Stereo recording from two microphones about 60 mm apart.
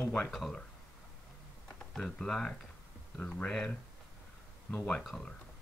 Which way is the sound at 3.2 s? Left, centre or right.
Left.